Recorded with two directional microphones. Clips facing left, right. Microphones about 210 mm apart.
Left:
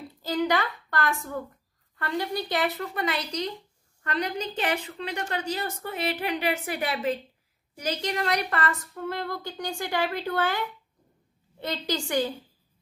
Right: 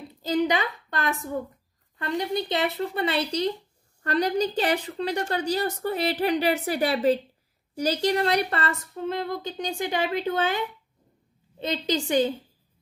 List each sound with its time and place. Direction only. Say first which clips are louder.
0.1 s a woman's voice: right 2 dB; 20° right (ahead or behind)